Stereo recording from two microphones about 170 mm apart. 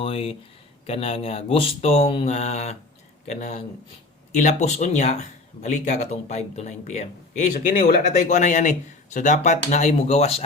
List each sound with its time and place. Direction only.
0.0 s speech: 35° left (ahead or behind)